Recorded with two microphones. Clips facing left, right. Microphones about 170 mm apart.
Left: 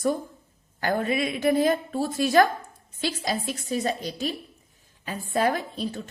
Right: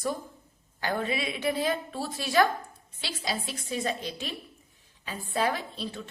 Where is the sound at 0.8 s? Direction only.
45° left (ahead or behind).